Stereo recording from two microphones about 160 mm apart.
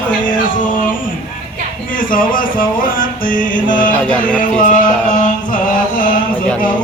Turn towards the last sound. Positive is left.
turn(degrees=60)  # may be behind; listen again after turning